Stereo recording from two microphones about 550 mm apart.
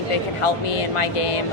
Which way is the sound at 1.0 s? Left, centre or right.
Left.